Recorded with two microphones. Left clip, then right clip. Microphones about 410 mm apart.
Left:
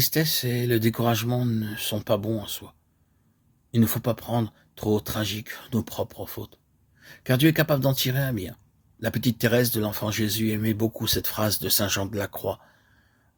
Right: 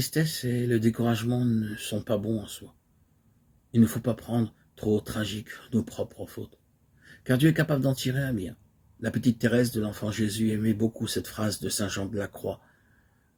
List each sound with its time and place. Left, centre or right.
0.0 s speech: left
3.7 s speech: left